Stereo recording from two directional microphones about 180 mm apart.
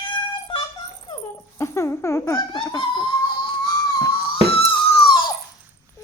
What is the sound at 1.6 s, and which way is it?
Speech, 15° left (ahead or behind).